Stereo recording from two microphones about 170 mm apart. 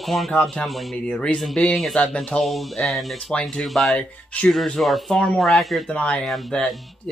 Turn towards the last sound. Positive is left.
turn(degrees=5)  # may be behind; listen again after turning